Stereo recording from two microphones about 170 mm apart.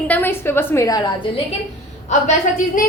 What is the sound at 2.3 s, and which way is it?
Speech, 50° left (ahead or behind).